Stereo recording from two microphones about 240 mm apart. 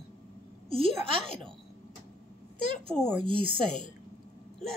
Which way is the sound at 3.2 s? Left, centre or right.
Right.